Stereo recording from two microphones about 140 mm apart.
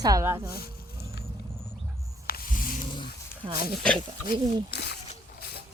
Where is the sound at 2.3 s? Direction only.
80° left.